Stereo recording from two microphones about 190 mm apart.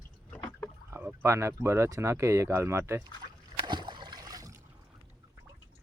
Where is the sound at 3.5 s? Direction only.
25° right (ahead or behind).